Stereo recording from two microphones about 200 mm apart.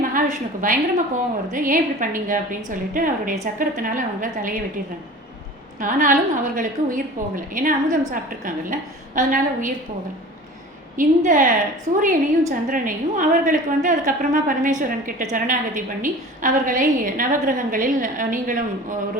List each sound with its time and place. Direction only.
0.0 s a woman's voice: 40° right (ahead or behind)
5.8 s a woman's voice: 40° right (ahead or behind)
10.9 s a woman's voice: 40° right (ahead or behind)